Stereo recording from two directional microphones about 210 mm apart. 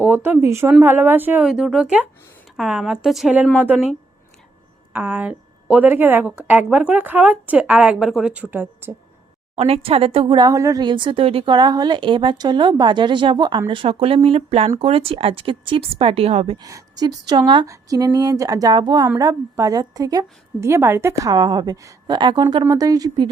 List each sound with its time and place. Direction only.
0.0 s a woman's voice: 10° right (ahead or behind)
4.9 s speech: 5° right (ahead or behind)
9.6 s speech: 30° right (ahead or behind)
16.6 s speech: 15° right (ahead or behind)